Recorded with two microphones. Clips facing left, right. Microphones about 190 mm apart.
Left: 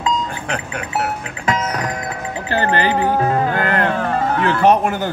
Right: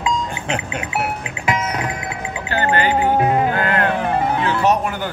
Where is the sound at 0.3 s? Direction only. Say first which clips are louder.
Right 1 dB; 25° right (ahead or behind).